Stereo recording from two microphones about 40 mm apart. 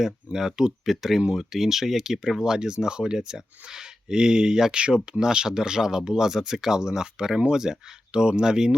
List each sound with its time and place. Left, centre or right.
0.3 s speech: centre